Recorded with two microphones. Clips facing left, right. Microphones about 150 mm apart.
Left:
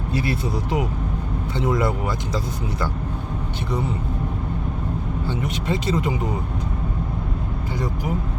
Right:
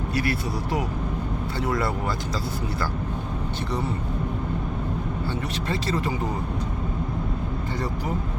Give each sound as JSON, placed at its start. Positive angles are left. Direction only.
{"t": 0.1, "sound": "speech", "side_deg": 20}
{"t": 5.3, "sound": "speech", "side_deg": 15}